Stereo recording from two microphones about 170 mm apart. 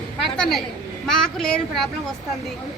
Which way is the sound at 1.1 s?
5° left (ahead or behind).